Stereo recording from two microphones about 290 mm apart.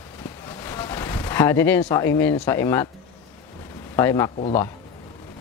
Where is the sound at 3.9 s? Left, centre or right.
Centre.